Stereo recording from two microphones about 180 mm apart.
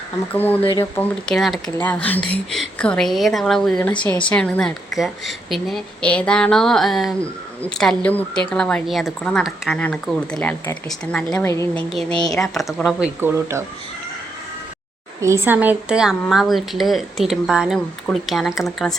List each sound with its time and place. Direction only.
0.3 s speech: 10° left (ahead or behind)
0.6 s speech: 25° left (ahead or behind)
0.9 s speech: centre (ahead or behind)
11.9 s speech: 5° left (ahead or behind)
13.1 s a woman's voice: 15° right (ahead or behind)
15.2 s a woman's voice: 15° right (ahead or behind)